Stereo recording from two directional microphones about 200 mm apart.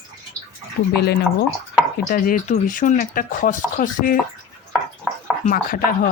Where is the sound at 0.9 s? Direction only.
55° left (ahead or behind).